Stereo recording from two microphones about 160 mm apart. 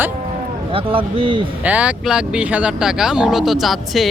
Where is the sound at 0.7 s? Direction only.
35° right (ahead or behind).